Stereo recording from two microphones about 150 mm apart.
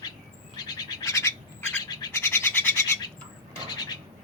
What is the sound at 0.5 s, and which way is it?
Bird, 25° left (ahead or behind).